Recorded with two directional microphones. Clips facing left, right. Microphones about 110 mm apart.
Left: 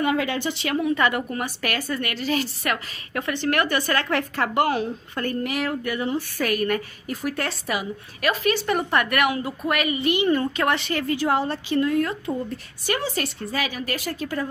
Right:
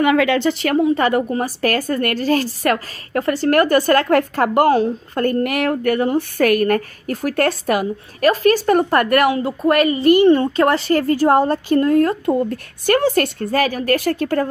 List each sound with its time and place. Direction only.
0.0 s speech: 85° right
0.7 s a woman's voice: 35° right (ahead or behind)
9.3 s speech: 30° right (ahead or behind)
12.3 s a woman's voice: 55° right (ahead or behind)